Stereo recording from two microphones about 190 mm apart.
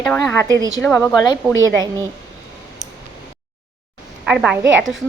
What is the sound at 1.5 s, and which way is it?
Speech, 90° right.